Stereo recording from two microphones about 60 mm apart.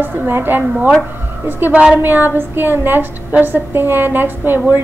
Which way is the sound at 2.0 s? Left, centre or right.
Right.